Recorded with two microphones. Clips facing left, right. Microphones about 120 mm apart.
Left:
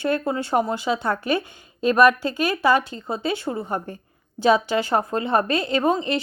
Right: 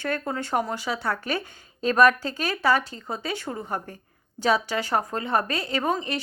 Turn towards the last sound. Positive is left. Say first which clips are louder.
# left 5 dB
turn(degrees=20)  # may be behind; listen again after turning